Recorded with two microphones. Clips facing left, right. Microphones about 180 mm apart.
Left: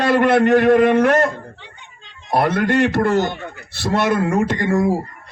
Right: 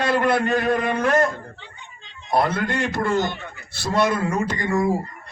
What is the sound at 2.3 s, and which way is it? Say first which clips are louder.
A man's voice: left 4 dB; 60° left (ahead or behind).